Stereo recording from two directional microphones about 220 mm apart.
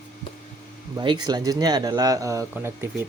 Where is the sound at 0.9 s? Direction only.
20° right (ahead or behind).